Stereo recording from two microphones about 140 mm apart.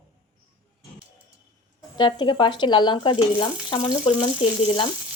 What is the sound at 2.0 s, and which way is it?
Speech, 35° left (ahead or behind).